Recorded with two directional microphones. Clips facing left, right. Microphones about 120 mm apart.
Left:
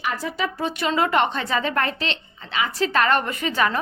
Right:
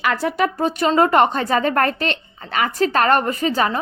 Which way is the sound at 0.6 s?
40° right (ahead or behind).